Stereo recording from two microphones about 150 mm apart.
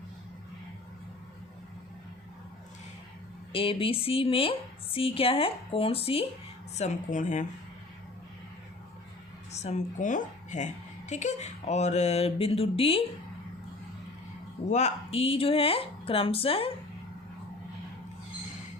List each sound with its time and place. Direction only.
3.5 s a woman's voice: 35° left (ahead or behind)
6.7 s a woman's voice: 50° left (ahead or behind)
9.5 s a woman's voice: 45° left (ahead or behind)
11.1 s a sound: 50° left (ahead or behind)
14.7 s a woman's voice: 50° left (ahead or behind)